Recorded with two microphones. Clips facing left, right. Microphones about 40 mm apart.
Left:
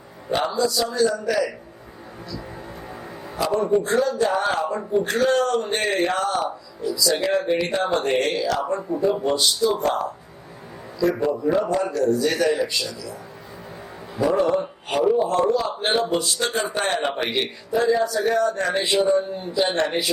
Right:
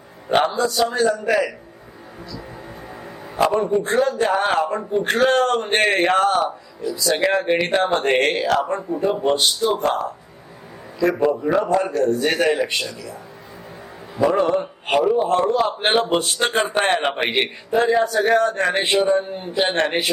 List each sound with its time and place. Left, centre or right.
0.3 s speech: right
3.3 s speech: right
11.2 s speech: right
14.2 s a sound: right
15.1 s speech: right